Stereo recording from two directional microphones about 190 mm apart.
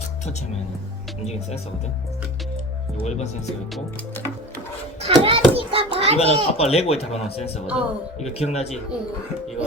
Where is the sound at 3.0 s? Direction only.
35° left (ahead or behind).